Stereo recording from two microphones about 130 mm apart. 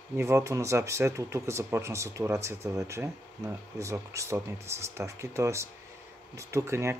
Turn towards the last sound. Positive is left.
turn(degrees=-20)  # may be behind; listen again after turning